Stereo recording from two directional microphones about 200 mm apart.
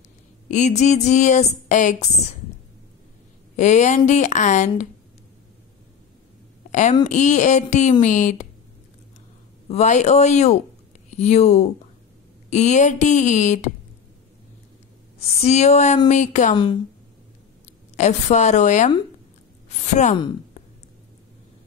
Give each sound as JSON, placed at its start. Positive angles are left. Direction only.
{"t": 0.5, "sound": "speech", "side_deg": 35}
{"t": 3.5, "sound": "speech", "side_deg": 35}
{"t": 6.7, "sound": "a woman's voice", "side_deg": 35}
{"t": 9.7, "sound": "speech", "side_deg": 35}
{"t": 15.1, "sound": "speech", "side_deg": 35}
{"t": 17.9, "sound": "speech", "side_deg": 35}